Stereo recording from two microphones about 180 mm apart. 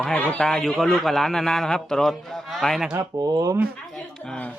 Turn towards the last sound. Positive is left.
turn(degrees=-20)  # may be behind; listen again after turning